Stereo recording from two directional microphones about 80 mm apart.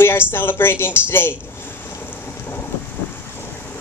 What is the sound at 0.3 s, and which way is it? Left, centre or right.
A woman's voice, left.